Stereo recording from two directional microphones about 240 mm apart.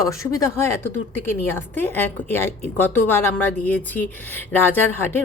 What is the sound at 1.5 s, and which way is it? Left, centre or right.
A woman's voice, centre.